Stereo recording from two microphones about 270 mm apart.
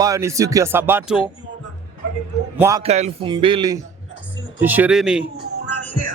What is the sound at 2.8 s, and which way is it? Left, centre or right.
Speech, right.